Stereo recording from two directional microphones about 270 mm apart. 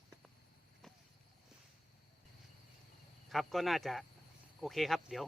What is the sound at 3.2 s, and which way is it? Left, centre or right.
Speech, centre.